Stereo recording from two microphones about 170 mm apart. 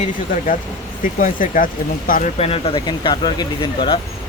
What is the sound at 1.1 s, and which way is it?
Speech, 55° left (ahead or behind).